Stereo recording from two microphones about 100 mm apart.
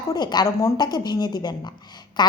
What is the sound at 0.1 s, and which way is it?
A woman's voice, 45° left (ahead or behind).